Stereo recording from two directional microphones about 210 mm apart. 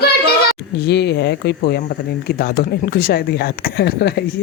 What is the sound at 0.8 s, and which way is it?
Speech, 50° left (ahead or behind).